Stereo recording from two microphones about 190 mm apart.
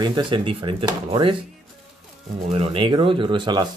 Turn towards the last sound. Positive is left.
turn(degrees=-25)  # may be behind; listen again after turning